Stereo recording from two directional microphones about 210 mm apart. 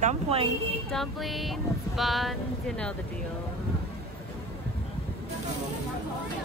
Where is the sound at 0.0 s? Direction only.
30° right (ahead or behind).